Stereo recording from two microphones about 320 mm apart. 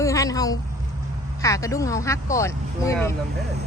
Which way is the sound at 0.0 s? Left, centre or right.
Centre.